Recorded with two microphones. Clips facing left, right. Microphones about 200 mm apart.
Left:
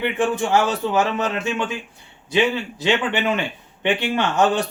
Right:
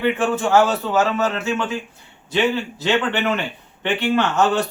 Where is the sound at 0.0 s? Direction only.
15° left (ahead or behind).